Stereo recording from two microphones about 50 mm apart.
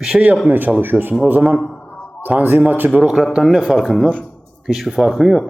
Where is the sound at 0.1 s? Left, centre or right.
Centre.